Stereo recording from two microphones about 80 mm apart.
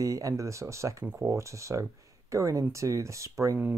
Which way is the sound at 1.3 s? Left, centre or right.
Right.